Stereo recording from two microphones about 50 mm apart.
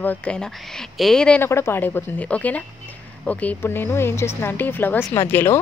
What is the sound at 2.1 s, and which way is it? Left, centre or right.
Speech, left.